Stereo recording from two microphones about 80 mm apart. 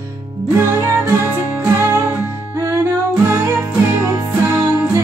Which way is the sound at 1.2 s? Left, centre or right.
Right.